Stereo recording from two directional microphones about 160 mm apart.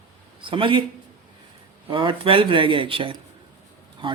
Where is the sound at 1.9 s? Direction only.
30° right (ahead or behind).